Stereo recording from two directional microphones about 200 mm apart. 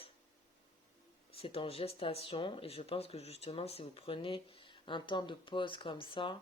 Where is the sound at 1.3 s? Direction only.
30° left (ahead or behind).